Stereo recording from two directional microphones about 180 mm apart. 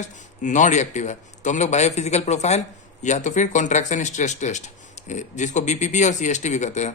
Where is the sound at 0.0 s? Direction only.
45° left (ahead or behind).